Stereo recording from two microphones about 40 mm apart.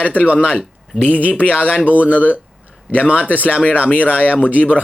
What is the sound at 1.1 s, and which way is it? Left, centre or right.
Speech, left.